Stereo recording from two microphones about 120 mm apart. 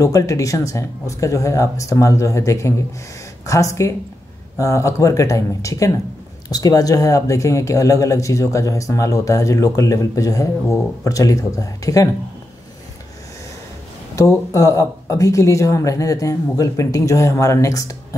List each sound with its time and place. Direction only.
0.0 s speech: 25° left (ahead or behind)
14.1 s speech: 30° left (ahead or behind)